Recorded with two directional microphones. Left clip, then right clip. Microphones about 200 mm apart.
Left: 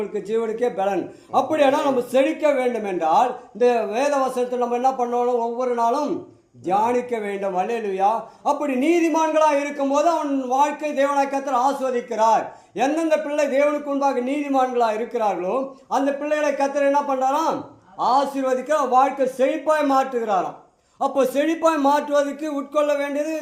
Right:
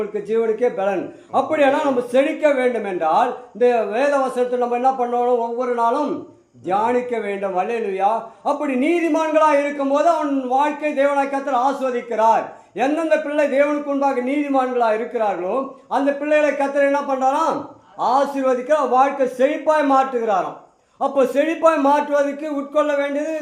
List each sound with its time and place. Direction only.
0.1 s a man's voice: 35° left (ahead or behind)